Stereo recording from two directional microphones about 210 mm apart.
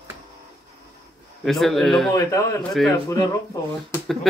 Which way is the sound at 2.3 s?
15° left (ahead or behind).